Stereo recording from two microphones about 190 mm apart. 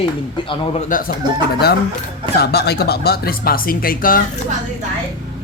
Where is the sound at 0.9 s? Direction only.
45° left (ahead or behind).